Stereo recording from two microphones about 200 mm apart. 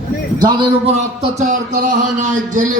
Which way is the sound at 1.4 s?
40° right (ahead or behind).